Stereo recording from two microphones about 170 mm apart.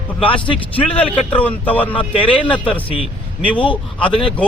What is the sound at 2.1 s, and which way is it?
Speech, 30° left (ahead or behind).